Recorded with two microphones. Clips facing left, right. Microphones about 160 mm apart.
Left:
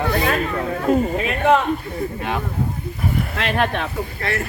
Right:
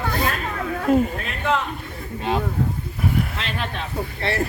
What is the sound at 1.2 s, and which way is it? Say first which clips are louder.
Speech: left 7 dB; 70° left (ahead or behind).